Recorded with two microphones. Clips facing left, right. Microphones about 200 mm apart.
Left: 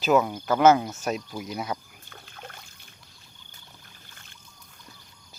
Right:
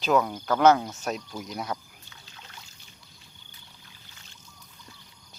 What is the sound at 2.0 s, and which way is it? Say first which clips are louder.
Trickle: left 8 dB; 55° left (ahead or behind).